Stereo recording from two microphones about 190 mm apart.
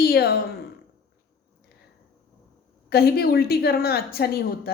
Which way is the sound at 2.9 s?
55° left (ahead or behind).